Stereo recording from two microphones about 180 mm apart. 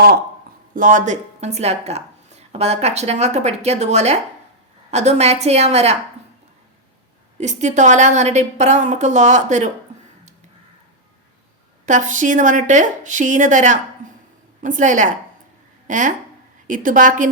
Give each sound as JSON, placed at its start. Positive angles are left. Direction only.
{"t": 0.8, "sound": "a woman's voice", "side_deg": -45}
{"t": 7.3, "sound": "a woman's voice", "side_deg": -40}
{"t": 11.9, "sound": "a woman's voice", "side_deg": -45}